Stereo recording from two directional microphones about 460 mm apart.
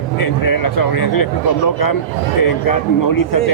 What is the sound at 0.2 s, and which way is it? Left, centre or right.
Speech, left.